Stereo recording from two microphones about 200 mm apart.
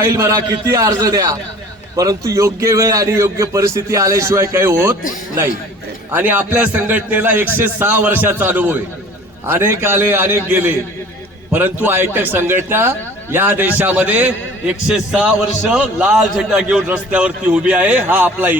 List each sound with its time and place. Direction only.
0.0 s a man's voice: 15° right (ahead or behind)
6.1 s a man's voice: 10° right (ahead or behind)